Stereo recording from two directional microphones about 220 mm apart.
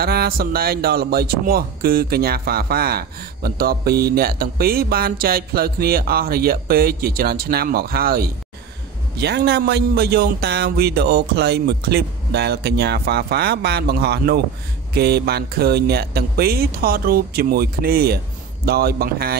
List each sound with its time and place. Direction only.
0.0 s a man's voice: 45° right (ahead or behind)